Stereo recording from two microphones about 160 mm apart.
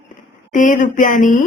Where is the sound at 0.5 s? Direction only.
55° left (ahead or behind).